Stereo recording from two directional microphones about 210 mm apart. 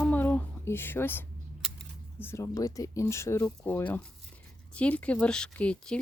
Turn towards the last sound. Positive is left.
turn(degrees=5)  # may be behind; listen again after turning